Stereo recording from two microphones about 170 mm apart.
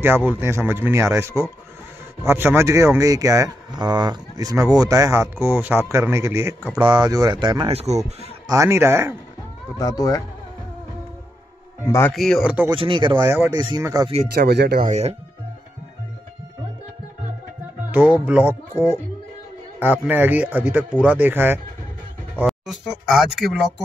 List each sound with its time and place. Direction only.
0.3 s a man's voice: 15° right (ahead or behind); by 8.0 s 40° right (ahead or behind)
8.5 s a man's voice: 15° right (ahead or behind)
9.8 s speech: 20° left (ahead or behind)
12.1 s speech: centre (ahead or behind)
12.6 s speech: 30° right (ahead or behind)
13.1 s a man's voice: 15° right (ahead or behind)
14.3 s speech: 70° right (ahead or behind)
14.8 s speech: 40° right (ahead or behind)
17.9 s a man's voice: 10° right (ahead or behind)
22.5 s speech: centre (ahead or behind)